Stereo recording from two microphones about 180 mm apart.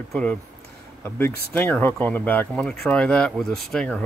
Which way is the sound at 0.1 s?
5° left (ahead or behind).